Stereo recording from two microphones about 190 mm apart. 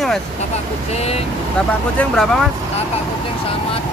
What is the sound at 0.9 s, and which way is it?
Speech, 35° left (ahead or behind).